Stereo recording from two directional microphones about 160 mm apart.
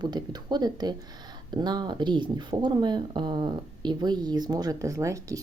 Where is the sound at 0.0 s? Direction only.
25° right (ahead or behind).